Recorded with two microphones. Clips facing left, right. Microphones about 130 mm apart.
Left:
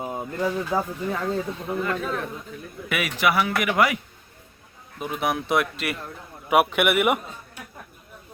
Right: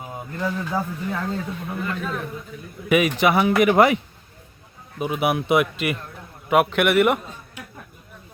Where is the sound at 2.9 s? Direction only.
20° right (ahead or behind).